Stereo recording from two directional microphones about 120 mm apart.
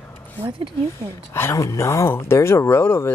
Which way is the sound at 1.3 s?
25° left (ahead or behind).